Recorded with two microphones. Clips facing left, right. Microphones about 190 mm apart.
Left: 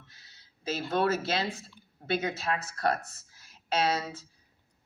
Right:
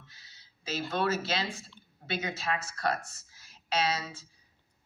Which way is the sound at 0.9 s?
55° left (ahead or behind).